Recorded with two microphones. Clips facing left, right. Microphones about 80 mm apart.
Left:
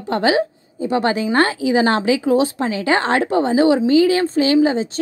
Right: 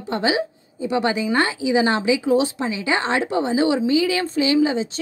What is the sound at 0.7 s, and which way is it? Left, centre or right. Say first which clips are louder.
A woman's voice: left 3 dB; left.